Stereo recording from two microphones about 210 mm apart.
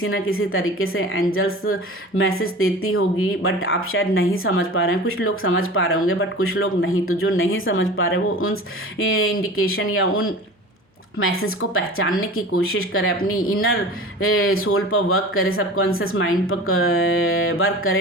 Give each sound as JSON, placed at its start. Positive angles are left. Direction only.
{"t": 0.0, "sound": "speech", "side_deg": 75}